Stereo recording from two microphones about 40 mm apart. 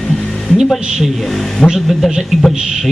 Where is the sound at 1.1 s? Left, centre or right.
Centre.